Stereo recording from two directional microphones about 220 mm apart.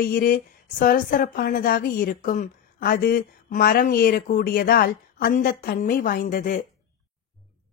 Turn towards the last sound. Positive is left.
turn(degrees=35)  # may be behind; listen again after turning